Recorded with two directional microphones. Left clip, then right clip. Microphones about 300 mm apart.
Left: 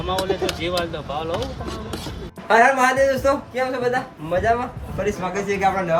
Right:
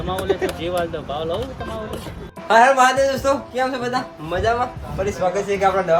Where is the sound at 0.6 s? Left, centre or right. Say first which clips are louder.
Right 1 dB; centre.